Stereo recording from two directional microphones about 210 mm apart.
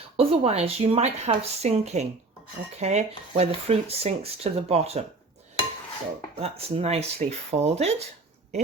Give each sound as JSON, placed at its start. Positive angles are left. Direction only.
{"t": 0.2, "sound": "speech", "side_deg": -30}
{"t": 6.3, "sound": "speech", "side_deg": -30}